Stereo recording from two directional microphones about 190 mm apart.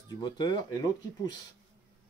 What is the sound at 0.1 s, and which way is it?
Speech, 20° left (ahead or behind).